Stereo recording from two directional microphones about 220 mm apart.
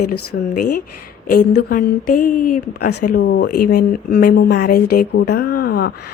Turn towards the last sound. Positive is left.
turn(degrees=45)  # may be behind; listen again after turning